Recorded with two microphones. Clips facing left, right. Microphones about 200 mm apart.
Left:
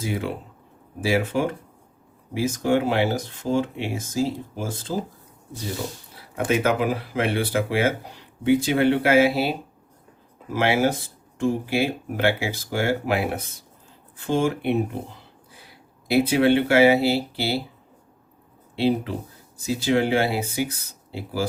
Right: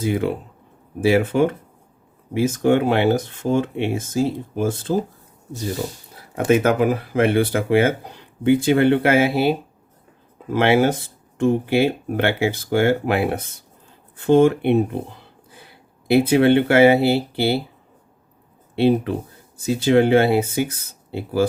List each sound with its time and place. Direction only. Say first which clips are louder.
0.0 s speech: right 6 dB; 55° right (ahead or behind)
2.6 s speech: right 4 dB; 55° right (ahead or behind)
6.1 s speech: right 6 dB; 50° right (ahead or behind)
14.3 s speech: right 8 dB; 60° right (ahead or behind)
16.0 s speech: right 4 dB; 55° right (ahead or behind)
18.8 s speech: right 5 dB; 60° right (ahead or behind)